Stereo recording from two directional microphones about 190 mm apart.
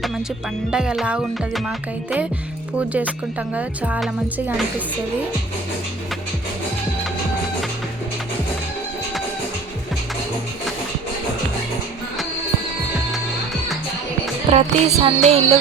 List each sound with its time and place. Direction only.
0.7 s music: 5° right (ahead or behind)
2.9 s speech: 5° right (ahead or behind)
14.5 s music: 35° right (ahead or behind)